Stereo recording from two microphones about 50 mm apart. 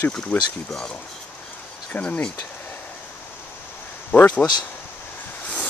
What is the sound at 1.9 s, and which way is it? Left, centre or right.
Speech, left.